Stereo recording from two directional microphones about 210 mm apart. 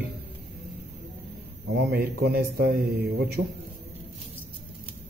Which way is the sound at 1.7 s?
50° right (ahead or behind).